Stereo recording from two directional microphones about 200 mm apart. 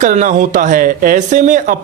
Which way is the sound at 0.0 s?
40° right (ahead or behind).